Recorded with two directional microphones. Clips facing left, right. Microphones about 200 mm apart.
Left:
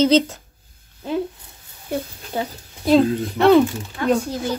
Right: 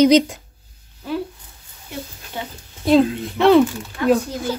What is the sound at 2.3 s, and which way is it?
Speech, 35° left (ahead or behind).